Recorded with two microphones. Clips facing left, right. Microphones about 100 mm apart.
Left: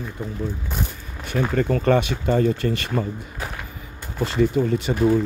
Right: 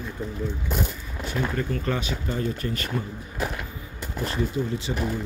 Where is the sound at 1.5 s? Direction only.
80° left.